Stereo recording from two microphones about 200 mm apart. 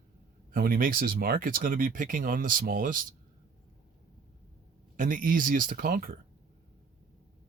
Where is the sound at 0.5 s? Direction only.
45° right (ahead or behind).